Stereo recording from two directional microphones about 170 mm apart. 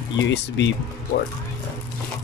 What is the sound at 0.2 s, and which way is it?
Speech, 90° left.